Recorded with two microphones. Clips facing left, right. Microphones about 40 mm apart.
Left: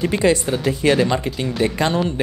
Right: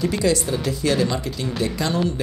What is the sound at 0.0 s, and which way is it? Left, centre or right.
Speech, left.